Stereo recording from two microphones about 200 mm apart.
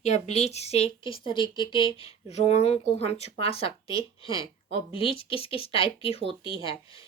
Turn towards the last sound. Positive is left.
turn(degrees=25)  # may be behind; listen again after turning